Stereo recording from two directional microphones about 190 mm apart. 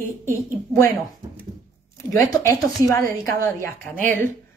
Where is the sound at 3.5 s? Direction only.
10° left (ahead or behind).